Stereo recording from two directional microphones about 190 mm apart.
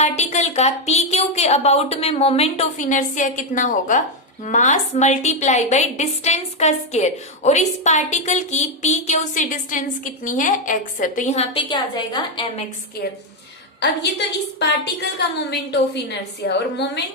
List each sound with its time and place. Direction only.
0.0 s a woman's voice: 35° left (ahead or behind)
11.5 s a woman's voice: 25° left (ahead or behind)
13.7 s a woman's voice: 60° left (ahead or behind)
15.4 s a woman's voice: 60° left (ahead or behind)